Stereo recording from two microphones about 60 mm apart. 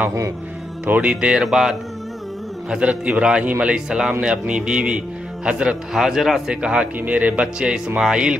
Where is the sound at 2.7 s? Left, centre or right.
Centre.